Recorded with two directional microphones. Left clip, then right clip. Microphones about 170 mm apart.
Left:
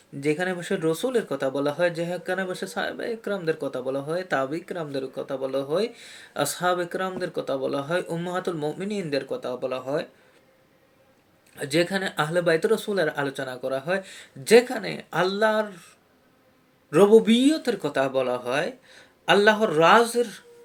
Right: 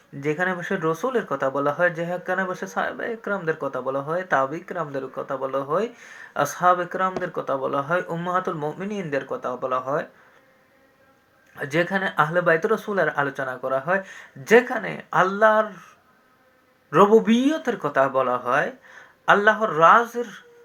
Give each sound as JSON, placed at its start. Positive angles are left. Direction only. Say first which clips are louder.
{"t": 0.3, "sound": "speech", "louder": "right 1 dB", "side_deg": 20}
{"t": 11.5, "sound": "speech", "louder": "right 1 dB", "side_deg": 25}
{"t": 16.9, "sound": "speech", "louder": "right 1 dB", "side_deg": 25}